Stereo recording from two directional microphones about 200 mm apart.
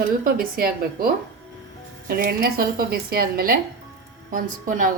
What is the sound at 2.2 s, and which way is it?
A woman's voice, 50° right (ahead or behind).